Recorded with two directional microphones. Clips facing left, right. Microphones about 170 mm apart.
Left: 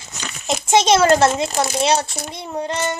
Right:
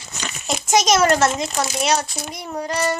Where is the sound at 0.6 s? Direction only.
30° left (ahead or behind).